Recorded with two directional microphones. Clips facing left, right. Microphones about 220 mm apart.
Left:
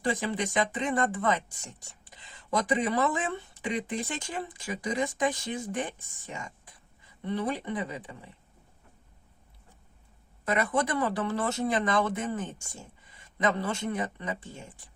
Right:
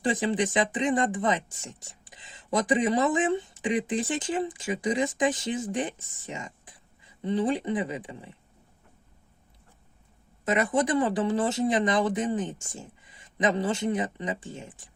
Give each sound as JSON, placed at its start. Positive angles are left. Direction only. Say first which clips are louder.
{"t": 0.0, "sound": "speech", "louder": "right 4 dB", "side_deg": -20}
{"t": 10.4, "sound": "speech", "louder": "right 3 dB", "side_deg": -20}